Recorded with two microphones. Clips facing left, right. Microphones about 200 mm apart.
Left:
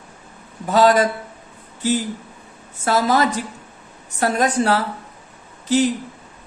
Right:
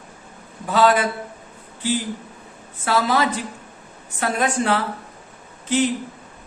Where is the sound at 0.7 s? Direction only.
40° left (ahead or behind).